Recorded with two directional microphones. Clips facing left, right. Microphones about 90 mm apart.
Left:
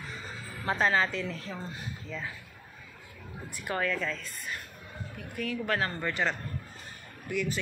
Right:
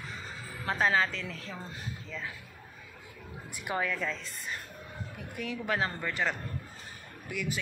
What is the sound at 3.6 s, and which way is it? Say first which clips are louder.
Speech: left 1 dB; 15° right (ahead or behind).